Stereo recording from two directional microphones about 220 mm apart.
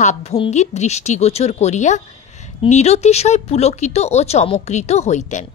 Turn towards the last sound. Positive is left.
turn(degrees=30)  # may be behind; listen again after turning